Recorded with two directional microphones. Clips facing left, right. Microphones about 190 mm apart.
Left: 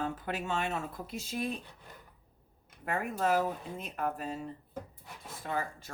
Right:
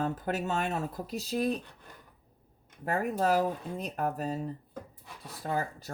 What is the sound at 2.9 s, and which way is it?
Speech, 40° right (ahead or behind).